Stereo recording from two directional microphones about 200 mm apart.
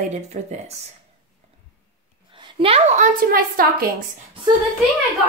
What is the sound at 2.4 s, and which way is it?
A woman's voice, 30° right (ahead or behind).